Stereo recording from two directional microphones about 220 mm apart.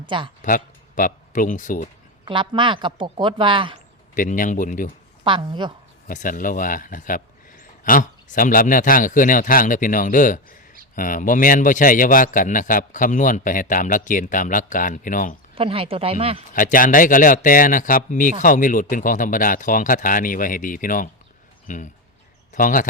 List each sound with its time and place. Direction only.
0.0 s speech: 20° right (ahead or behind)
0.4 s speech: 40° left (ahead or behind)
2.2 s speech: 20° right (ahead or behind)
4.1 s speech: 35° left (ahead or behind)
5.2 s speech: 20° right (ahead or behind)
6.1 s speech: 40° left (ahead or behind)
15.5 s speech: 25° right (ahead or behind)
16.5 s speech: 35° left (ahead or behind)